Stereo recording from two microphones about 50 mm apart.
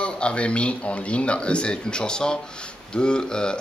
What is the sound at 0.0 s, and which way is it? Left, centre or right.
Speech, left.